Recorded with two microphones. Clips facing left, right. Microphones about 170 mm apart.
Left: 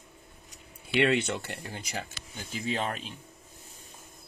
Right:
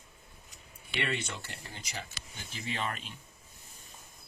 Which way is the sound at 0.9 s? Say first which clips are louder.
Left 10 dB; 65° left (ahead or behind).